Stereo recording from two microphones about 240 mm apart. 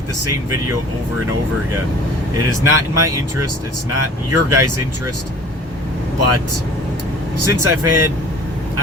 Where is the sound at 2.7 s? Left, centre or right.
Right.